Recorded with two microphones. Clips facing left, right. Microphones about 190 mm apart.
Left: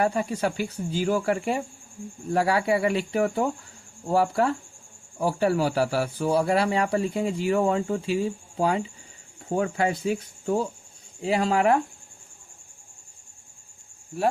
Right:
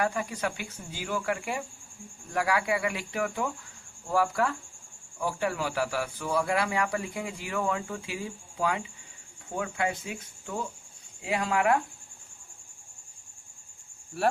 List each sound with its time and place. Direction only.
0.0 s a man's voice: 30° left (ahead or behind)